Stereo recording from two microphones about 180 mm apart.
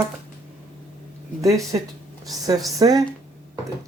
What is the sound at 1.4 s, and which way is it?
Speech, 20° right (ahead or behind).